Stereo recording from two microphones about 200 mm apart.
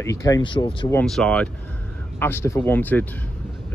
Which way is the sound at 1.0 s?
5° left (ahead or behind).